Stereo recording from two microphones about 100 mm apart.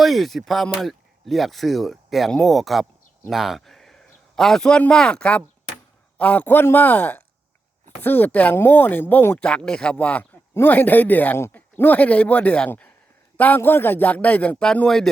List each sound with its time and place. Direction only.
0.0 s a man's voice: centre (ahead or behind)